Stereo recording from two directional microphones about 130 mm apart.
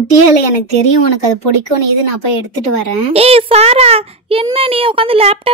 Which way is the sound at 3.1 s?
50° right (ahead or behind).